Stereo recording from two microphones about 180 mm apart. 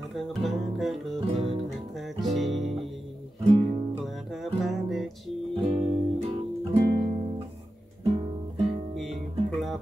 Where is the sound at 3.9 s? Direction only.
Centre (ahead or behind).